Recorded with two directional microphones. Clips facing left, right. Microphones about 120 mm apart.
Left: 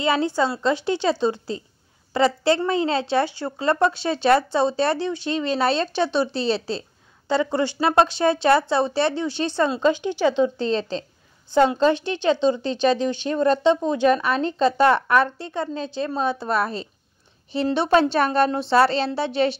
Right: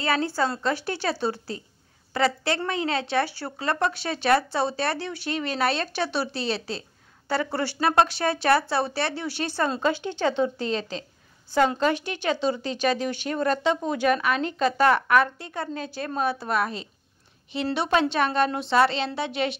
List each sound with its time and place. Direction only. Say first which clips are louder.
0.0 s speech: left 4 dB; 20° left (ahead or behind)
10.6 s a woman's voice: left 5 dB; 30° left (ahead or behind)